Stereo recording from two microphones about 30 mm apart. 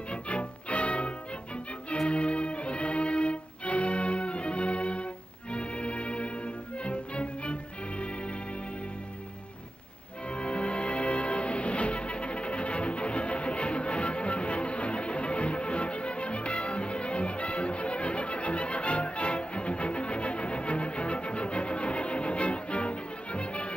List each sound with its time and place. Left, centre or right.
0.1 s music: left
10.3 s music: left